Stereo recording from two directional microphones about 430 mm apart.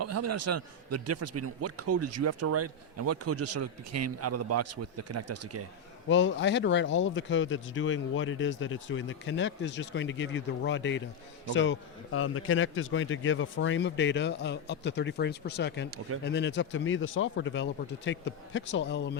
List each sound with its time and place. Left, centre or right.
0.0 s a man's voice: right
6.1 s speech: left
15.9 s speech: right
16.2 s speech: left